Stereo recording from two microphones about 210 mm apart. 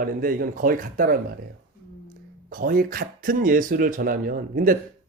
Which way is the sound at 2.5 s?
40° right (ahead or behind).